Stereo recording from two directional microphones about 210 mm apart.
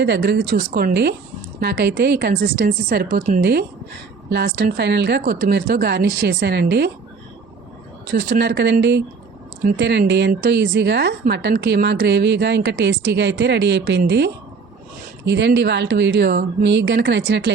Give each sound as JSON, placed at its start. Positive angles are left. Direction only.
{"t": 0.0, "sound": "a woman's voice", "side_deg": -50}
{"t": 3.4, "sound": "a woman's voice", "side_deg": -50}
{"t": 8.0, "sound": "speech", "side_deg": -55}